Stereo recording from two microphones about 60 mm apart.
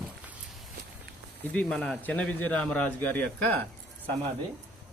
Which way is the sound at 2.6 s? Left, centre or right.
Centre.